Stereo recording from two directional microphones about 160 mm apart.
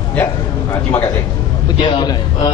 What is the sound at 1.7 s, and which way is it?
Speech, 30° left (ahead or behind).